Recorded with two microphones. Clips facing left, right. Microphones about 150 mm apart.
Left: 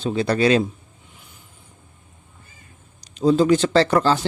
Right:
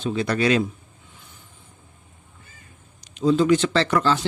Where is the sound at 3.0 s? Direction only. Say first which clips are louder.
Left 2 dB; 35° left (ahead or behind).